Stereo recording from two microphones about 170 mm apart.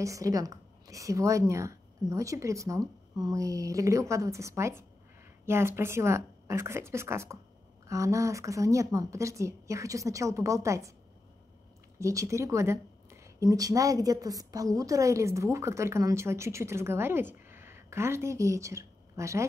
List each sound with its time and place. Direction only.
0.0 s a woman's voice: 20° right (ahead or behind)
12.0 s a woman's voice: 20° right (ahead or behind)